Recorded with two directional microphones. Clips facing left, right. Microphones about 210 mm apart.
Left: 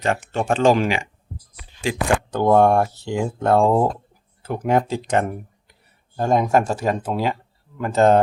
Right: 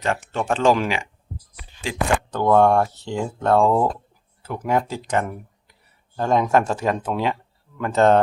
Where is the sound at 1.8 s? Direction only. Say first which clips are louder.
Left 2 dB; 10° left (ahead or behind).